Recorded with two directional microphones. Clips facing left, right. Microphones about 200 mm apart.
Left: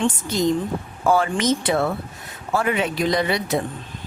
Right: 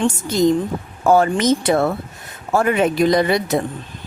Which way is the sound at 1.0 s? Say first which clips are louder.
Right 5 dB; 45° right (ahead or behind).